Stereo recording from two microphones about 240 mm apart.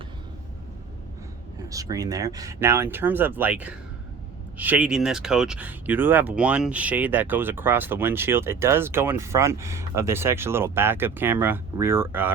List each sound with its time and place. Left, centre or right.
1.7 s speech: centre